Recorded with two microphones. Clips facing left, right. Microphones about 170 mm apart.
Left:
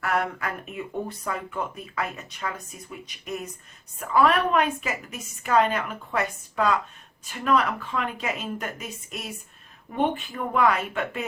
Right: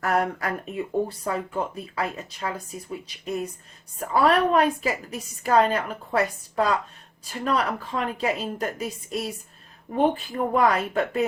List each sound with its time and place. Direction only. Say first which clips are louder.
0.0 s speech: right 3 dB; 40° right (ahead or behind)